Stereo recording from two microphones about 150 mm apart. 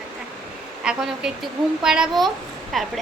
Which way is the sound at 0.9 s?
5° right (ahead or behind).